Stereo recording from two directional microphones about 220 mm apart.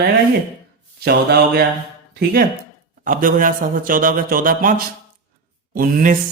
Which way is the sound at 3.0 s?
40° right (ahead or behind).